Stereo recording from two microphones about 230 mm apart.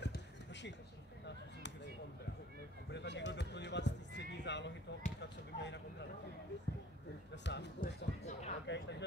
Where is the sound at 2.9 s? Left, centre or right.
Left.